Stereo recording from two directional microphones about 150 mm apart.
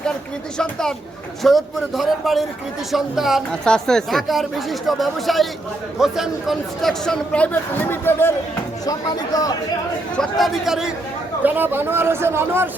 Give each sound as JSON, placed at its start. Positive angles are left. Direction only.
{"t": 0.6, "sound": "speech", "side_deg": 5}
{"t": 8.9, "sound": "speech", "side_deg": 25}
{"t": 10.2, "sound": "speech", "side_deg": 0}
{"t": 11.4, "sound": "speech", "side_deg": -15}